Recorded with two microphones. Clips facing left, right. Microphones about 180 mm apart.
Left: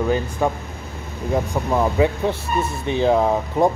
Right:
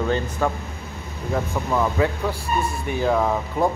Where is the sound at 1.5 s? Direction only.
20° left (ahead or behind).